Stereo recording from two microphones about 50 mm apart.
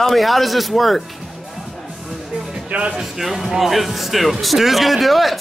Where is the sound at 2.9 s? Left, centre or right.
Centre.